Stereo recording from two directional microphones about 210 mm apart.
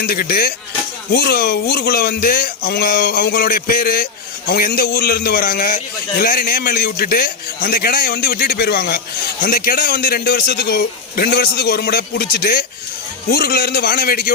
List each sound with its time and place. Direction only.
0.0 s speech: 45° left (ahead or behind)